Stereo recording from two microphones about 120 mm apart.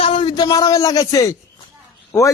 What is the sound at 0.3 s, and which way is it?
Speech, 30° left (ahead or behind).